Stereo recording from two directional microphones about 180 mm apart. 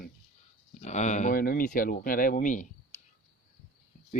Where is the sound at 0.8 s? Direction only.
40° left (ahead or behind).